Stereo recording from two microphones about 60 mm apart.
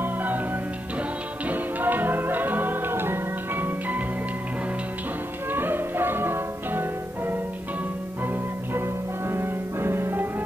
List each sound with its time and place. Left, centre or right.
0.0 s music: right
1.5 s music: right
5.5 s music: right
9.3 s music: right